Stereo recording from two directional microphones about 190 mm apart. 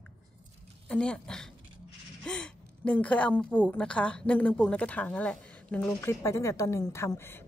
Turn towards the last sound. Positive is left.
turn(degrees=10)  # may be behind; listen again after turning